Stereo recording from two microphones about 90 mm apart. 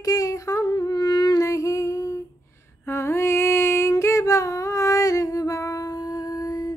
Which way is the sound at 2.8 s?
30° left (ahead or behind).